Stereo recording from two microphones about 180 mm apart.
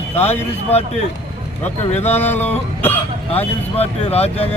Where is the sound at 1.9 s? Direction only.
35° left (ahead or behind).